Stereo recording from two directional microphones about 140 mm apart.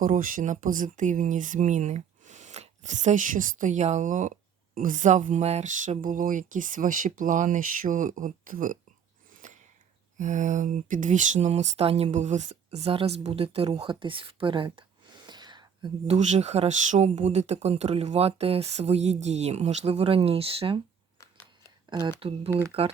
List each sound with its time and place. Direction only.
0.0 s speech: 75° right (ahead or behind)
9.3 s a sound: 65° right (ahead or behind)
10.2 s speech: 65° right (ahead or behind); by 15.9 s 30° right (ahead or behind)
16.0 s speech: 55° right (ahead or behind)
21.9 s speech: 35° right (ahead or behind)
22.4 s speech: 20° right (ahead or behind)